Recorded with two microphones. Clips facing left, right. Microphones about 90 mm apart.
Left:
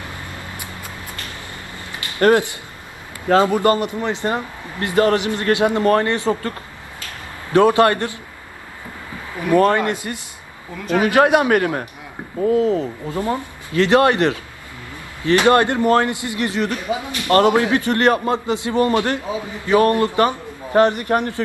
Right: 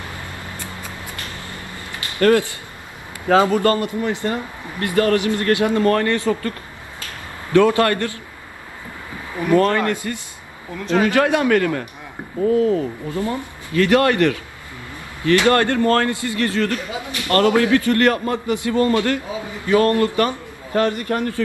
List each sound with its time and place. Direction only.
1.5 s a sound: 20° left (ahead or behind)
3.4 s a man's voice: 20° left (ahead or behind)
7.5 s a man's voice: 20° left (ahead or behind)
9.5 s a man's voice: 20° left (ahead or behind)